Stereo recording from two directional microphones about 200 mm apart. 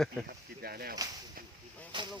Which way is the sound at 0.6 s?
50° right (ahead or behind).